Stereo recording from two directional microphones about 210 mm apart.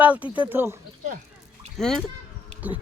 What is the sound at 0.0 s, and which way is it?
Speech, 5° right (ahead or behind).